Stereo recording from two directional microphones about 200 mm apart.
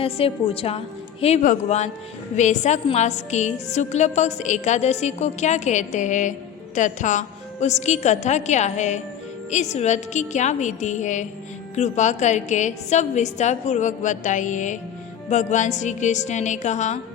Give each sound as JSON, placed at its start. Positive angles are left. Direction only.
{"t": 0.0, "sound": "a woman's voice", "side_deg": 30}